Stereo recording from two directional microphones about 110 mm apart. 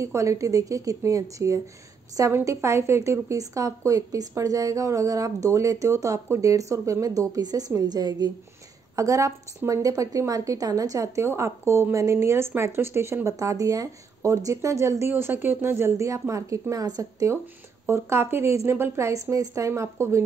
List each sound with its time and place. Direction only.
0.0 s a woman's voice: 25° right (ahead or behind)